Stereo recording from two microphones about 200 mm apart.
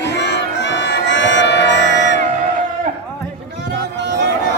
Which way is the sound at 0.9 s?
65° left (ahead or behind).